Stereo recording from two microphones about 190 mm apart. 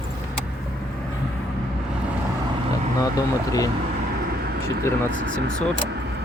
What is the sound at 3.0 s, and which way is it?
Speech, 20° left (ahead or behind).